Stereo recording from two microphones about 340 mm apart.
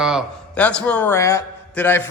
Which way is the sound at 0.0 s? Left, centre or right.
Centre.